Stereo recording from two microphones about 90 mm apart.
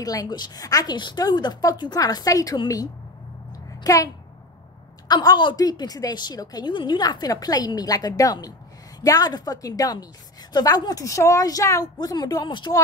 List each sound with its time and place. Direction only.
0.0 s a woman's voice: 45° left (ahead or behind)
3.8 s a woman's voice: 40° left (ahead or behind)
5.0 s a woman's voice: 50° left (ahead or behind)
6.7 s a woman's voice: 55° left (ahead or behind)